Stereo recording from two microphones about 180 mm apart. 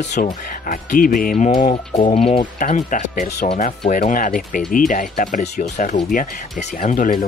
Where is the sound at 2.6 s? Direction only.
45° left (ahead or behind).